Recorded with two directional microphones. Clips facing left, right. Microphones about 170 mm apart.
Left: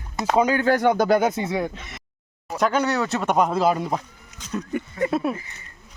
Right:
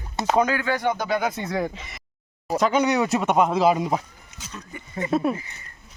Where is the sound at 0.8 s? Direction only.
50° left (ahead or behind).